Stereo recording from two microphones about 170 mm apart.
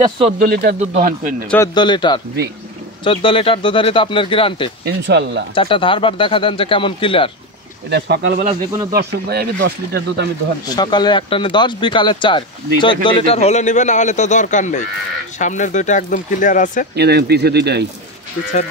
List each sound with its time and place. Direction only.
0.4 s speech: 60° right (ahead or behind)
0.7 s speech: 45° right (ahead or behind)
1.8 s speech: 25° left (ahead or behind)
4.8 s speech: 85° right
5.5 s speech: 30° left (ahead or behind)
7.9 s speech: 80° right
10.8 s speech: 25° left (ahead or behind); by 16.8 s 50° left (ahead or behind)
16.9 s speech: 75° right (ahead or behind)